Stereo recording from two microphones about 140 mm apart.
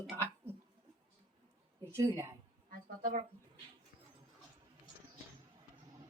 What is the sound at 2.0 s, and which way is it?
Speech, 25° right (ahead or behind).